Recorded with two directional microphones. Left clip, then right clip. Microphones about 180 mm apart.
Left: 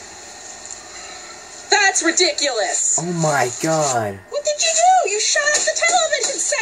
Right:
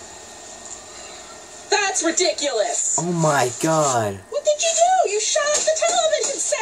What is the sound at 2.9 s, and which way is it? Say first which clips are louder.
Speech: right 1 dB; 5° right (ahead or behind).